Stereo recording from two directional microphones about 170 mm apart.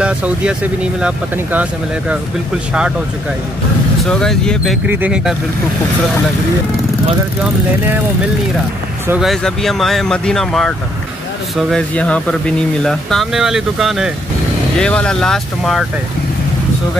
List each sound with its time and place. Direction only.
0.0 s speech: 5° right (ahead or behind)
4.0 s speech: 5° left (ahead or behind)
4.8 s speech: 10° right (ahead or behind)
9.2 s speech: centre (ahead or behind)